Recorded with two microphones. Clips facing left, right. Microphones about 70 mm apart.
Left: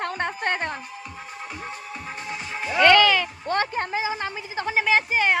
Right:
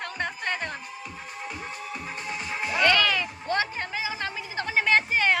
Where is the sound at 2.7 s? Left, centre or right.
Left.